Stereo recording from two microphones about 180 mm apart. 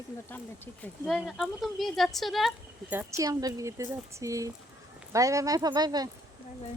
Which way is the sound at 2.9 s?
15° right (ahead or behind).